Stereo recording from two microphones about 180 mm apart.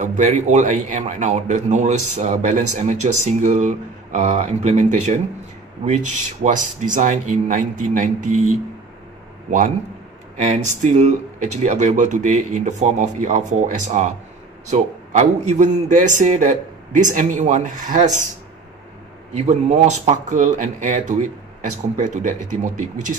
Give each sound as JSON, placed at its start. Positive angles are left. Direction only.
{"t": 0.0, "sound": "a man's voice", "side_deg": -45}
{"t": 10.3, "sound": "a man's voice", "side_deg": -40}
{"t": 19.3, "sound": "speech", "side_deg": -35}